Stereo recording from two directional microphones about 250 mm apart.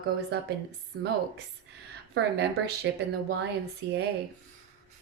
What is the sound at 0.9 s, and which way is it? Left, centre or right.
Speech, right.